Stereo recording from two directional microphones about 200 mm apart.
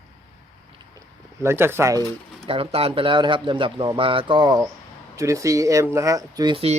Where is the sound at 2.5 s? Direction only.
30° right (ahead or behind).